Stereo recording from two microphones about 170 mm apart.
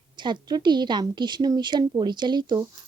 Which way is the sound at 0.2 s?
25° right (ahead or behind).